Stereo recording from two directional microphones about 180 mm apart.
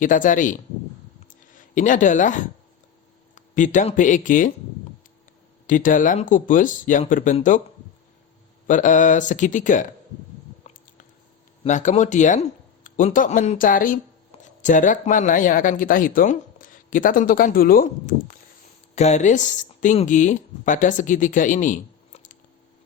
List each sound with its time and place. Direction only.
0.0 s speech: 45° left (ahead or behind)
5.6 s speech: 45° left (ahead or behind)
8.6 s speech: 45° left (ahead or behind)
11.6 s speech: 45° left (ahead or behind)